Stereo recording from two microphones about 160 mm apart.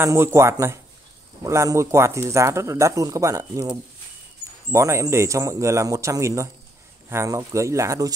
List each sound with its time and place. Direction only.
0.0 s speech: 15° right (ahead or behind)
4.7 s speech: 20° right (ahead or behind)